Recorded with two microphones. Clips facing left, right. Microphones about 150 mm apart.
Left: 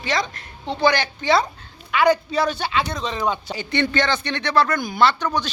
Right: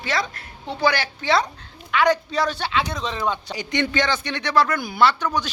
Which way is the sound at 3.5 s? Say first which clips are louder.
Left 1 dB; 10° right (ahead or behind).